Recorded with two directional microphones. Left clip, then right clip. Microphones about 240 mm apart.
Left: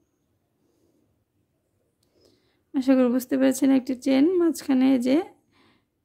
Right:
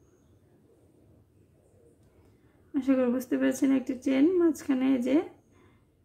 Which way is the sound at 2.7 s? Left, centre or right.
Left.